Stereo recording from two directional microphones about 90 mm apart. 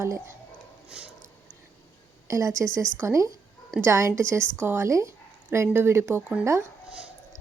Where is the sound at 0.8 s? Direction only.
10° right (ahead or behind).